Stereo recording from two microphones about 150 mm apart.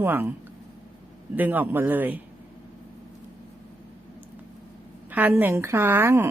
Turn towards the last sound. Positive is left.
turn(degrees=-15)  # may be behind; listen again after turning